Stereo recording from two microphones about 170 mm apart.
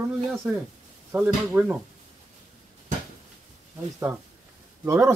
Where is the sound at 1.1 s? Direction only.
5° right (ahead or behind).